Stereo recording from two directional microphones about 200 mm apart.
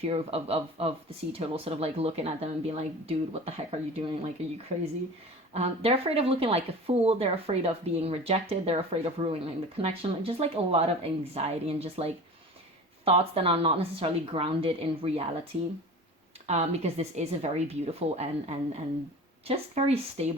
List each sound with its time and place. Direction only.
0.0 s speech: 30° right (ahead or behind)
16.5 s speech: 35° right (ahead or behind)